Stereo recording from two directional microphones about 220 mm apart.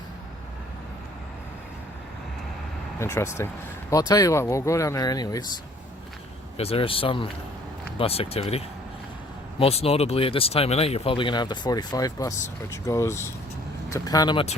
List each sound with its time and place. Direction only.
3.0 s speech: 10° left (ahead or behind)
6.6 s speech: 25° left (ahead or behind)